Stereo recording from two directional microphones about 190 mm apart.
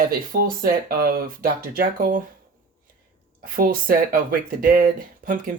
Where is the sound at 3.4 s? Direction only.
50° right (ahead or behind).